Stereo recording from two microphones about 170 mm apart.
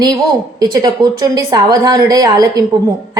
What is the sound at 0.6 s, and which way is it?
A woman's voice, 25° right (ahead or behind).